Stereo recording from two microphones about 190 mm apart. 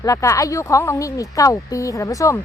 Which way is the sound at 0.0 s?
15° left (ahead or behind).